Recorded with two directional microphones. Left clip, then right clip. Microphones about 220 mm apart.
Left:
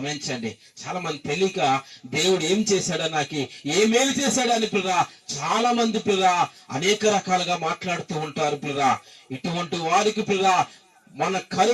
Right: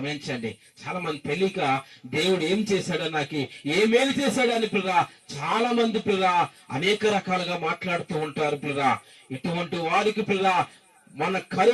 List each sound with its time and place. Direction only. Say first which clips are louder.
0.0 s speech: left 2 dB; 45° left (ahead or behind)